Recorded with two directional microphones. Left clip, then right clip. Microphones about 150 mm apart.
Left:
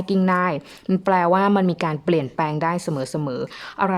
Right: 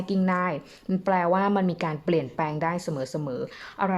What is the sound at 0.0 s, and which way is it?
A woman's voice, 35° left (ahead or behind).